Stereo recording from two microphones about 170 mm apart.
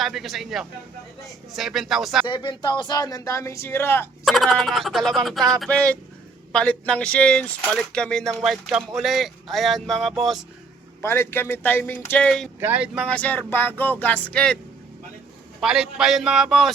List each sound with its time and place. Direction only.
0.0 s speech: centre (ahead or behind)
2.2 s speech: 25° left (ahead or behind)
4.3 s speech: centre (ahead or behind)
11.0 s speech: 15° left (ahead or behind)
12.5 s speech: 10° right (ahead or behind); by 14.6 s 5° left (ahead or behind)
15.6 s speech: 5° right (ahead or behind)